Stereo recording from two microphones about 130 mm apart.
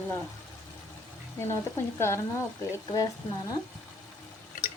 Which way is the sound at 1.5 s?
20° left (ahead or behind).